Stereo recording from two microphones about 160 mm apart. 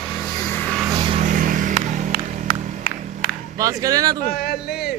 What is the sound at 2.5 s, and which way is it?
Music, 45° left (ahead or behind).